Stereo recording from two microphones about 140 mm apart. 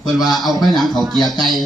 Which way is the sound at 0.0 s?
Centre (ahead or behind).